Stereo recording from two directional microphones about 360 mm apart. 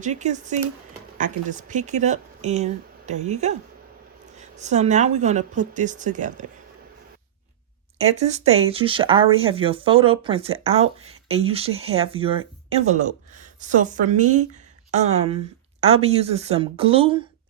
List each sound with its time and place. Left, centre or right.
0.0 s speech: centre
7.9 s speech: centre